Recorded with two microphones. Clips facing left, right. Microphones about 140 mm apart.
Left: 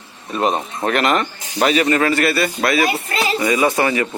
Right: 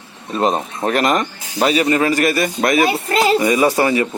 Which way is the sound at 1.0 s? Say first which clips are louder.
Right 1 dB; 15° right (ahead or behind).